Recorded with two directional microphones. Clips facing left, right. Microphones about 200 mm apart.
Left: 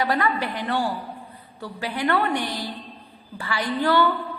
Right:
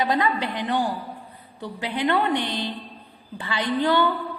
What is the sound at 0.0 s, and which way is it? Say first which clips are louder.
A woman's voice: even; 20° right (ahead or behind).